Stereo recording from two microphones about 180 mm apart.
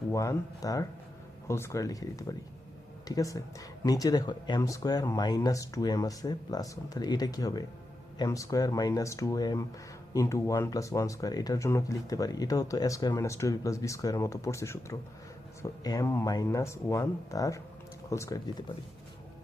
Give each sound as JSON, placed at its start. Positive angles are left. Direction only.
{"t": 0.1, "sound": "speech", "side_deg": 15}